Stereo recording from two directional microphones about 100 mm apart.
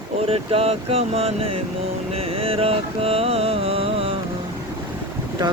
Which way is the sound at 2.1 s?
75° right (ahead or behind).